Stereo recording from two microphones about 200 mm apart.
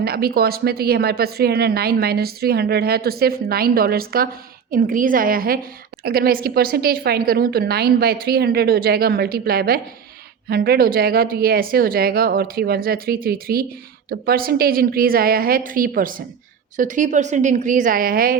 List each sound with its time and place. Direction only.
0.0 s a woman's voice: 50° right (ahead or behind)